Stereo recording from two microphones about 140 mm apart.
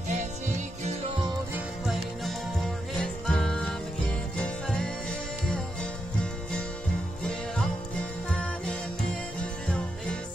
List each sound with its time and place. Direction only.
0.1 s music: 55° right (ahead or behind)
3.0 s music: 5° left (ahead or behind)
4.6 s music: 5° left (ahead or behind)
7.2 s music: 5° left (ahead or behind)
9.7 s music: 10° left (ahead or behind)